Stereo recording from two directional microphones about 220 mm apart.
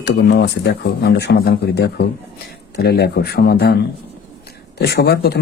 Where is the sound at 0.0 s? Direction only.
50° left (ahead or behind).